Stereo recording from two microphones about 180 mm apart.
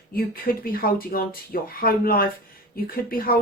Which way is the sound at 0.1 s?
55° left (ahead or behind).